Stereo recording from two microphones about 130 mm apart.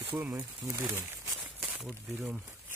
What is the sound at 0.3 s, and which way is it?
Speech, 25° right (ahead or behind).